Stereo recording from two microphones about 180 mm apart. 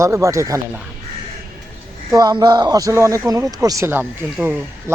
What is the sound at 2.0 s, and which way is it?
Speech, 20° right (ahead or behind).